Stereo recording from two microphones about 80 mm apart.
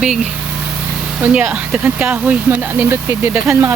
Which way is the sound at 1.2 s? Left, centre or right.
Centre.